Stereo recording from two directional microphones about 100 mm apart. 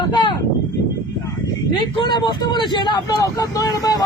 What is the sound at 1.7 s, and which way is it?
Speech, 50° left (ahead or behind).